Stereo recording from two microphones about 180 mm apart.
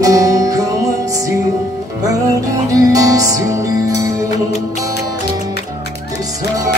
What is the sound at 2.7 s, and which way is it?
Music, 20° right (ahead or behind).